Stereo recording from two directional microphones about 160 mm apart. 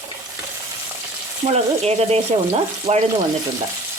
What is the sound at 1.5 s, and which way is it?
Speech, 40° right (ahead or behind).